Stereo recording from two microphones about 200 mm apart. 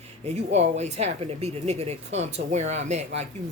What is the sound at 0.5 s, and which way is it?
Speech, 35° right (ahead or behind).